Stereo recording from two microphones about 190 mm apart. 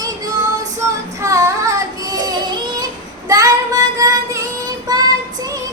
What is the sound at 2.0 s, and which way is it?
Child singing, 20° right (ahead or behind).